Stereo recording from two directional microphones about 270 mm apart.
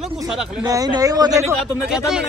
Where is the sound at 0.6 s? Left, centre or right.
Centre.